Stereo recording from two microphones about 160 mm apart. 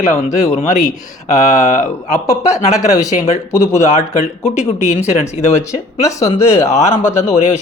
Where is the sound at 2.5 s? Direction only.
20° left (ahead or behind).